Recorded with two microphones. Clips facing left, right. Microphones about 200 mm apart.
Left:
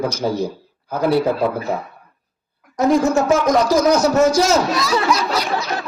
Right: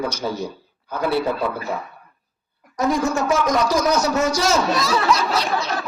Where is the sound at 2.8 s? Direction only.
35° left (ahead or behind).